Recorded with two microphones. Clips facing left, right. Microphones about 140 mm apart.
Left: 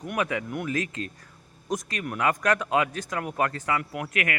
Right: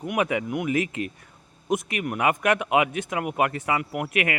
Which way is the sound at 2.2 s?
20° right (ahead or behind).